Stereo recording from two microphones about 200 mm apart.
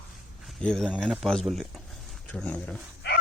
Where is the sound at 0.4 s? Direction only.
5° left (ahead or behind).